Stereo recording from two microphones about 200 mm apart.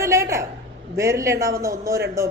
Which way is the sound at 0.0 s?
15° right (ahead or behind).